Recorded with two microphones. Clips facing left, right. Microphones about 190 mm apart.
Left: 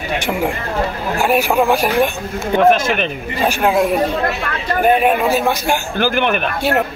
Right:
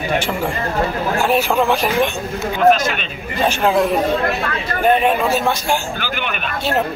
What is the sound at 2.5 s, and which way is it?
Speech, 55° left (ahead or behind).